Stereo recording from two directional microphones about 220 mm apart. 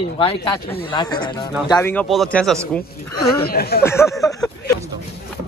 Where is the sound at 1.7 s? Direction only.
10° left (ahead or behind).